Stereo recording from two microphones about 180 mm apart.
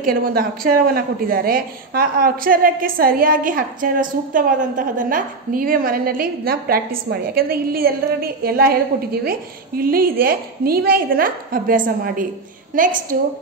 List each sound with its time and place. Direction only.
0.0 s a woman's voice: 55° right (ahead or behind)